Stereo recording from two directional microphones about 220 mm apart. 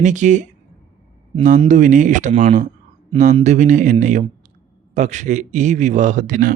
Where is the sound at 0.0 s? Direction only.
35° right (ahead or behind).